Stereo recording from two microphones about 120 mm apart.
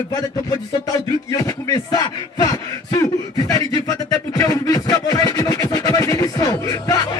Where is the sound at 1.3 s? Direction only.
35° left (ahead or behind).